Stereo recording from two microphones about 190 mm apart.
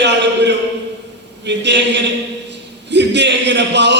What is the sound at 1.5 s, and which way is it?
A man's voice, 65° right (ahead or behind).